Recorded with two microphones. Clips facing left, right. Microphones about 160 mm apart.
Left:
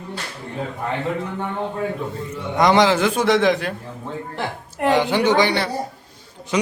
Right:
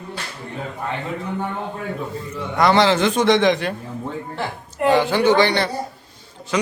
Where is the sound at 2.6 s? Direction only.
15° left (ahead or behind).